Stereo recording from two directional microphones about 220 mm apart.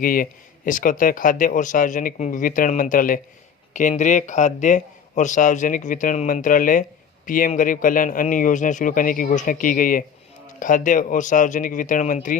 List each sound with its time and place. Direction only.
0.0 s speech: 40° left (ahead or behind)